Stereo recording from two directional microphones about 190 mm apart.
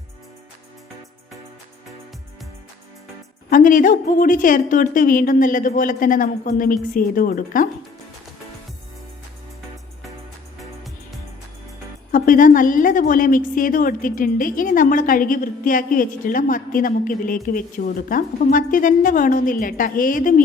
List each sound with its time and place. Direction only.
3.5 s a woman's voice: 45° left (ahead or behind)
12.1 s a woman's voice: 45° left (ahead or behind)